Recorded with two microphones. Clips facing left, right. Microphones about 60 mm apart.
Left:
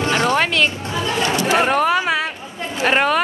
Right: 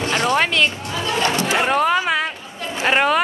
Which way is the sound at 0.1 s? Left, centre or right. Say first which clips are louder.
Left 1 dB; left.